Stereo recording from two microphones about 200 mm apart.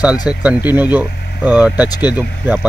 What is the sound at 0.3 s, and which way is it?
Speech, 5° right (ahead or behind).